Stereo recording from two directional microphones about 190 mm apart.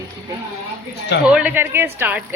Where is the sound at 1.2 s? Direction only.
5° right (ahead or behind).